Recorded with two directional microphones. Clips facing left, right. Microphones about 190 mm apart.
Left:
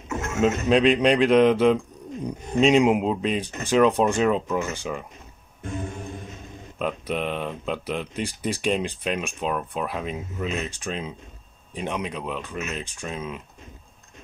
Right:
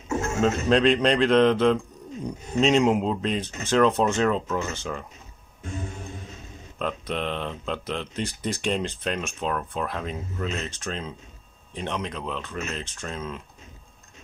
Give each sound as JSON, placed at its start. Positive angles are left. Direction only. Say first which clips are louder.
{"t": 0.1, "sound": "a sound", "louder": "right 3 dB", "side_deg": -30}
{"t": 0.7, "sound": "speech", "louder": "left 2 dB", "side_deg": 10}
{"t": 6.8, "sound": "speech", "louder": "left 2 dB", "side_deg": 10}